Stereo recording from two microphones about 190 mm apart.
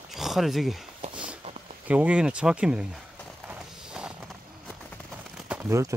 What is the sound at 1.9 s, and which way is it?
Speech, 5° right (ahead or behind).